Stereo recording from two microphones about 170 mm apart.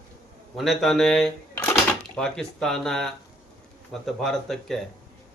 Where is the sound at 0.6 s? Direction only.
Centre (ahead or behind).